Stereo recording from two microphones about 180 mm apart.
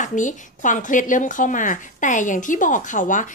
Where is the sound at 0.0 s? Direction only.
45° left (ahead or behind).